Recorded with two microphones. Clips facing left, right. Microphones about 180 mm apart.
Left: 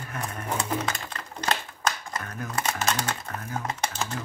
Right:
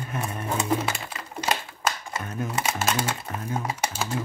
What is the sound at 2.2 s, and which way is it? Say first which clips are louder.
Speech: right 5 dB; 20° right (ahead or behind).